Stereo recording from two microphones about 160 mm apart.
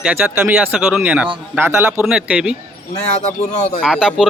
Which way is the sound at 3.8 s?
5° right (ahead or behind).